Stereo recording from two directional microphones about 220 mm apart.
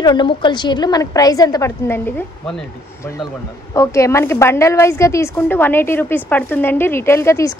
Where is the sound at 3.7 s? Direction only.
15° left (ahead or behind).